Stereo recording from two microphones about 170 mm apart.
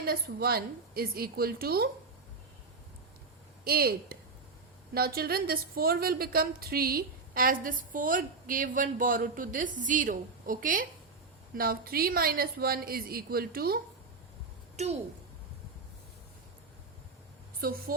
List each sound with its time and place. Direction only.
0.0 s a woman's voice: 65° right (ahead or behind)
3.6 s a woman's voice: 65° right (ahead or behind)
14.8 s a woman's voice: 40° right (ahead or behind)
17.6 s a woman's voice: 60° right (ahead or behind)